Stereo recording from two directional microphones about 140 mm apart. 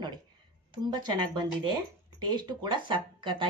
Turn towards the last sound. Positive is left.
turn(degrees=-35)  # may be behind; listen again after turning